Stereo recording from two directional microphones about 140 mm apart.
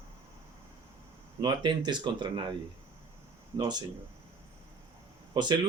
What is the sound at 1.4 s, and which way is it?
Speech, 30° right (ahead or behind).